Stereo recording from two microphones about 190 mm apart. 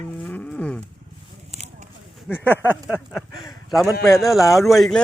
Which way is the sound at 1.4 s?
35° right (ahead or behind).